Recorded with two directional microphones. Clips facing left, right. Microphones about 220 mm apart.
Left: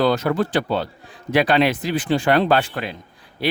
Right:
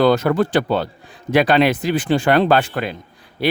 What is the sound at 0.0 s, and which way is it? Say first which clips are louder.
Speech: right 4 dB; 55° right (ahead or behind).